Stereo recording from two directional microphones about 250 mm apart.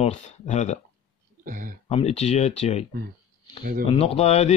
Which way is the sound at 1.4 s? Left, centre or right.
Right.